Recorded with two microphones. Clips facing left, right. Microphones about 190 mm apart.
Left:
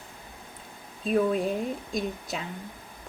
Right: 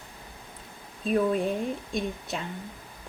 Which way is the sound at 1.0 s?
Centre (ahead or behind).